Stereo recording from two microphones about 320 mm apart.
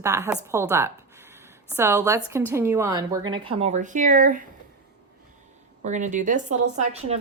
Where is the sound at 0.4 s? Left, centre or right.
Centre.